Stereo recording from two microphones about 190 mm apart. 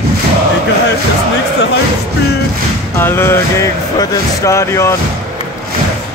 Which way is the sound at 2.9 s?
10° left (ahead or behind).